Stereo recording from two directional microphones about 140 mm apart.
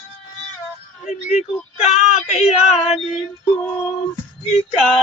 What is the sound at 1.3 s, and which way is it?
Speech, 50° left (ahead or behind).